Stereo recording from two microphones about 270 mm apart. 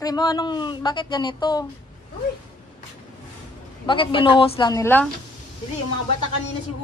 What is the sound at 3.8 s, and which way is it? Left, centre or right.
A woman's voice, centre.